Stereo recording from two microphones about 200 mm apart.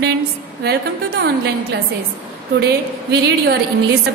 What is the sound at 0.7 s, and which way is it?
Speech, 50° right (ahead or behind).